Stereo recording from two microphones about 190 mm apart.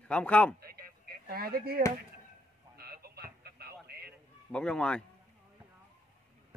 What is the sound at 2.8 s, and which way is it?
Chicken, 55° right (ahead or behind).